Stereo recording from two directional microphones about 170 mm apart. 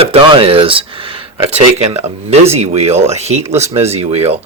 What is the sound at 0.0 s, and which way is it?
Speech, 35° right (ahead or behind).